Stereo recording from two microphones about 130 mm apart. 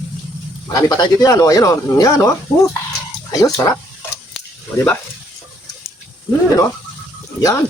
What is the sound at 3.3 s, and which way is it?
Speech, 25° left (ahead or behind).